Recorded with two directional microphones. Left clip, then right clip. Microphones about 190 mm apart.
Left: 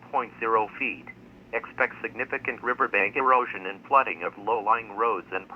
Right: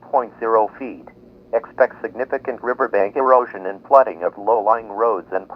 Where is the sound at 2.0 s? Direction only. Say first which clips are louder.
Right 7 dB; 40° left (ahead or behind).